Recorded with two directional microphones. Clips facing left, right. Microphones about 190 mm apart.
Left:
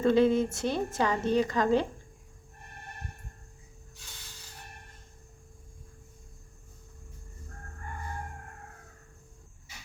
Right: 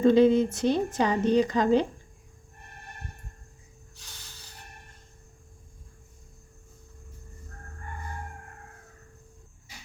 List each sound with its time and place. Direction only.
0.0 s a woman's voice: 20° right (ahead or behind)